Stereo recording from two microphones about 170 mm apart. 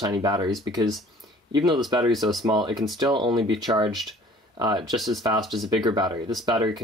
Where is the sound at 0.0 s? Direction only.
25° right (ahead or behind).